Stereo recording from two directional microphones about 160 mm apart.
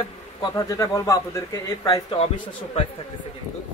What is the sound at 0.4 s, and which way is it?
A man's voice, 20° left (ahead or behind).